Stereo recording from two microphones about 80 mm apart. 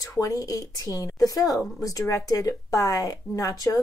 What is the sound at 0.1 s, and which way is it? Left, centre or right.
Speech, left.